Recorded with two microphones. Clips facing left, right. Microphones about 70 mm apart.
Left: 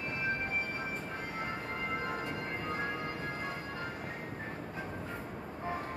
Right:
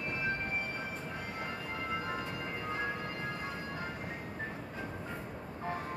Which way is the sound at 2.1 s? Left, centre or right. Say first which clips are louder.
Left 1 dB; left.